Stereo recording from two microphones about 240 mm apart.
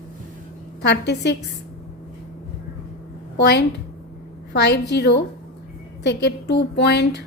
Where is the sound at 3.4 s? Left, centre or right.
Left.